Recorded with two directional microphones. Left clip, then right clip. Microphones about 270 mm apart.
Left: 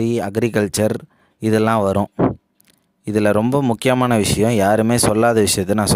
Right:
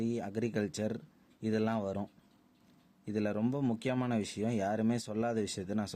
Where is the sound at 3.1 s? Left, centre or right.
Left.